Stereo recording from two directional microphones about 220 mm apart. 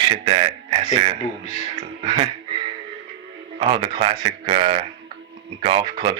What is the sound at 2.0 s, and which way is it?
Speech, 25° right (ahead or behind).